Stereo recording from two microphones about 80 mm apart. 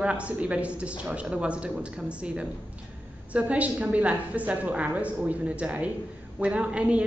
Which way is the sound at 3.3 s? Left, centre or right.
Centre.